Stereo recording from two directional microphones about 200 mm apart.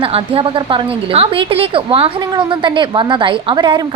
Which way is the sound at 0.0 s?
30° right (ahead or behind).